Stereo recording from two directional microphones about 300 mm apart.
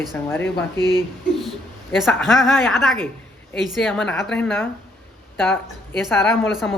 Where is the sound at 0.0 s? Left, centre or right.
Centre.